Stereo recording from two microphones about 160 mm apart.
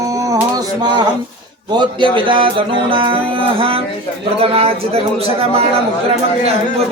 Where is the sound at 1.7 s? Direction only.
30° right (ahead or behind).